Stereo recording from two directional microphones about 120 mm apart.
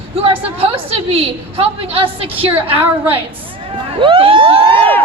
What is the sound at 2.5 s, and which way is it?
Speech, 15° right (ahead or behind).